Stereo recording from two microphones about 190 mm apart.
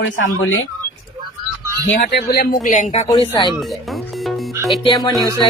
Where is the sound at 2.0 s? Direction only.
60° left (ahead or behind).